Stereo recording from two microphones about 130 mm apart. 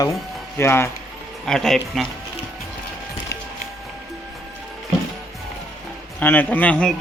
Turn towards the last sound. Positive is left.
turn(degrees=10)  # may be behind; listen again after turning